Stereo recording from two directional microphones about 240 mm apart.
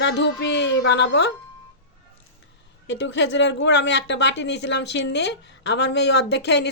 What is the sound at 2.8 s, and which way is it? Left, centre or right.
Speech, left.